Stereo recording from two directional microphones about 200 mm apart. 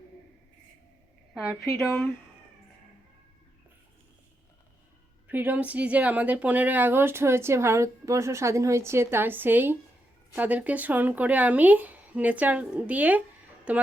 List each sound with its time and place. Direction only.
1.5 s speech: 15° left (ahead or behind)
5.3 s speech: 10° right (ahead or behind)